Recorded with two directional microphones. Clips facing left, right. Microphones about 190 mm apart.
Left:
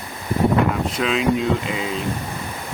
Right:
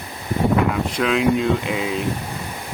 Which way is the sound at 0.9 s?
Centre (ahead or behind).